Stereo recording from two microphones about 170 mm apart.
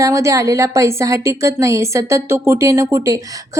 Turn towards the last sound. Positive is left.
turn(degrees=-20)  # may be behind; listen again after turning